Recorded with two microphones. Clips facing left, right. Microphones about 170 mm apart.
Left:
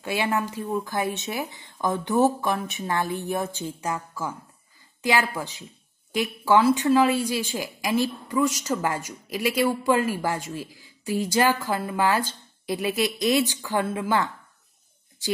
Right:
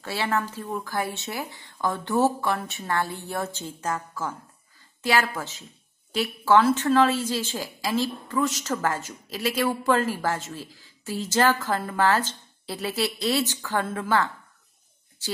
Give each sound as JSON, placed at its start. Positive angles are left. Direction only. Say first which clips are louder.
{"t": 0.0, "sound": "a woman's voice", "louder": "left 2 dB", "side_deg": 15}